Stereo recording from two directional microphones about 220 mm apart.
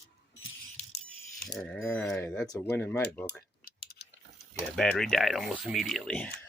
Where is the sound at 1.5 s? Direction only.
5° left (ahead or behind).